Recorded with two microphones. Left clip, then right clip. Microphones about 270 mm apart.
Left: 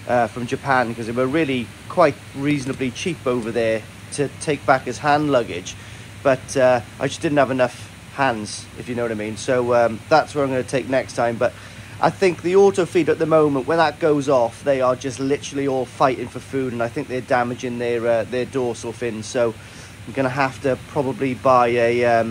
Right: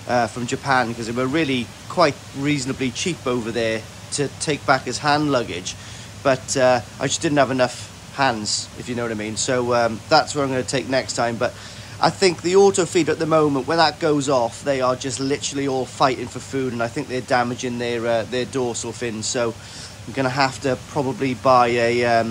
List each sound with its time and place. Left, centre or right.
0.1 s speech: centre